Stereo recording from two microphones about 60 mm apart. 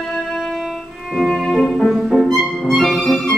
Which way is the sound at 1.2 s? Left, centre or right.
Centre.